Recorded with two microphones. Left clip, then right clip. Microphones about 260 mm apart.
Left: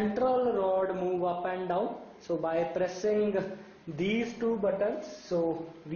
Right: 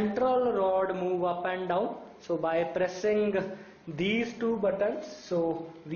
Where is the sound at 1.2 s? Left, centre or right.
Centre.